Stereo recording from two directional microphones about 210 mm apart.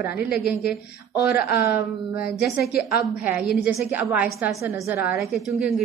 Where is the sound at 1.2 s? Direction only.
45° left (ahead or behind).